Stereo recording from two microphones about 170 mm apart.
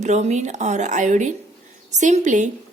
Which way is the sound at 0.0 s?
45° right (ahead or behind).